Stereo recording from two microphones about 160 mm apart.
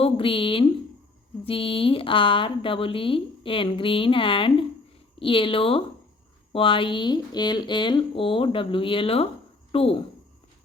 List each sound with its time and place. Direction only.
0.0 s speech: 35° left (ahead or behind)